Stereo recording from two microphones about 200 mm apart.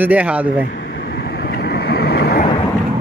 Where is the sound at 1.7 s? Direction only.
50° left (ahead or behind).